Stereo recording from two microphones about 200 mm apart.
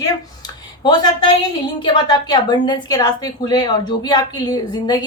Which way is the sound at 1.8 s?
20° left (ahead or behind).